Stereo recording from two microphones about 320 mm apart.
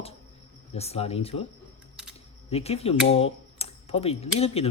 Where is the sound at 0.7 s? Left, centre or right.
Centre.